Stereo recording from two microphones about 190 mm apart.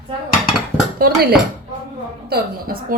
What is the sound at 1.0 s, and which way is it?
A woman's voice, 50° right (ahead or behind).